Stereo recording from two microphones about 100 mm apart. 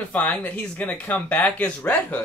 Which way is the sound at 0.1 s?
15° left (ahead or behind).